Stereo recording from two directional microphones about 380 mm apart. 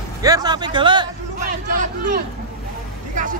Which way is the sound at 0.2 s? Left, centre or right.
Centre.